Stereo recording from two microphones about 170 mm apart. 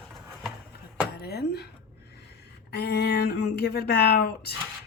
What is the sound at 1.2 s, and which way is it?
Speech, 70° left (ahead or behind).